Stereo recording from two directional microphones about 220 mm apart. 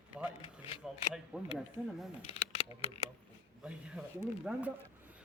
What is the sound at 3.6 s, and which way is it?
Speech, 5° right (ahead or behind).